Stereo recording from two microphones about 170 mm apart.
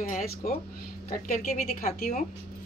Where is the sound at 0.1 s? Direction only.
60° left (ahead or behind).